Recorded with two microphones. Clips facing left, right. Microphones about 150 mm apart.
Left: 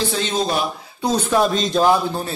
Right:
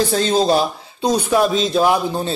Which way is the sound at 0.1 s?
35° right (ahead or behind).